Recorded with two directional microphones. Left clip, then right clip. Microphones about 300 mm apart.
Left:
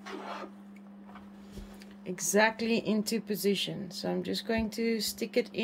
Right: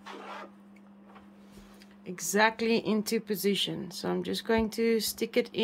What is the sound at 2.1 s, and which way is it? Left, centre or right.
Speech, centre.